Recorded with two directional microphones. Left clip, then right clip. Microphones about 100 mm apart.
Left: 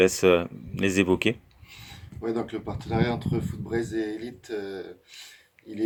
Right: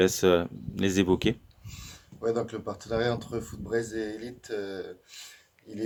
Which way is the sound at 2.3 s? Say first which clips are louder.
Left 2 dB; 45° right (ahead or behind).